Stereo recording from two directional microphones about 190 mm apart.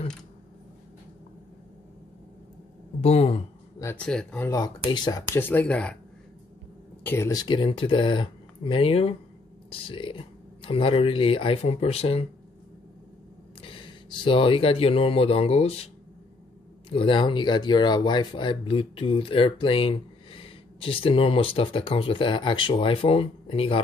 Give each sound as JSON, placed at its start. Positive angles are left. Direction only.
{"t": 3.0, "sound": "speech", "side_deg": 30}
{"t": 3.8, "sound": "speech", "side_deg": 5}
{"t": 4.5, "sound": "speech", "side_deg": 20}
{"t": 7.0, "sound": "speech", "side_deg": 10}
{"t": 13.6, "sound": "speech", "side_deg": 25}
{"t": 16.9, "sound": "speech", "side_deg": 25}